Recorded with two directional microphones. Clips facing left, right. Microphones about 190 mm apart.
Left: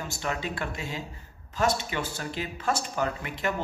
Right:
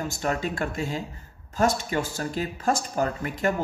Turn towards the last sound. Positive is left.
turn(degrees=-45)  # may be behind; listen again after turning